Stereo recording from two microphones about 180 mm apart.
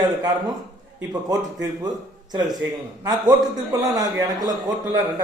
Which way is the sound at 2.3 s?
20° right (ahead or behind).